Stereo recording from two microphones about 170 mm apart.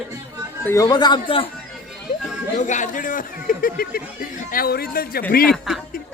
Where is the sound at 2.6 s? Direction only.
45° left (ahead or behind); by 5.2 s 60° left (ahead or behind).